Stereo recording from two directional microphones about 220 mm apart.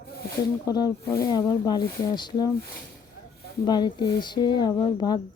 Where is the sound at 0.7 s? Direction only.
15° left (ahead or behind).